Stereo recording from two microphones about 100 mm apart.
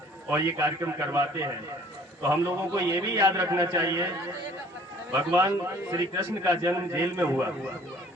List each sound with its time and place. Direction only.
0.3 s a man's voice: 20° right (ahead or behind)
5.4 s a man's voice: 35° right (ahead or behind)